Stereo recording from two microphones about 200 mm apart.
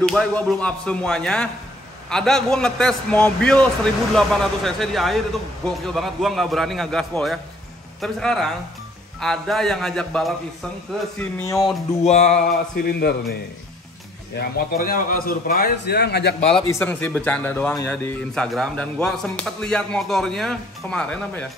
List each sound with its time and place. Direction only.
0.0 s a man's voice: centre (ahead or behind)
11.1 s speech: 15° left (ahead or behind)
12.0 s music: 35° left (ahead or behind)
12.7 s a man's voice: 50° left (ahead or behind)
16.3 s music: 30° left (ahead or behind)
16.6 s a man's voice: 10° left (ahead or behind)